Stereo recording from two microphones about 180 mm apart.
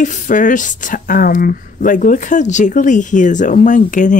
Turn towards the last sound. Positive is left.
turn(degrees=45)  # may be behind; listen again after turning